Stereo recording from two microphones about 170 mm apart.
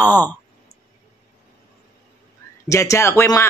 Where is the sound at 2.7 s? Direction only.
20° left (ahead or behind).